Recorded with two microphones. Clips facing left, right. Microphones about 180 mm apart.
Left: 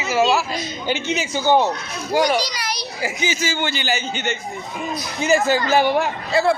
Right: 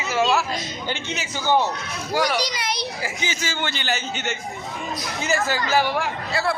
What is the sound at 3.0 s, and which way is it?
A man's voice, 10° left (ahead or behind).